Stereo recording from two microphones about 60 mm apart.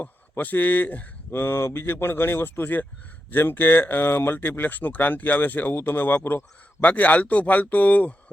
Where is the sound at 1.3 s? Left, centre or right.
Left.